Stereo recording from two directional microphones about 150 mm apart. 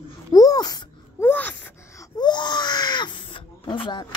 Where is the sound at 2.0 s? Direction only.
30° left (ahead or behind).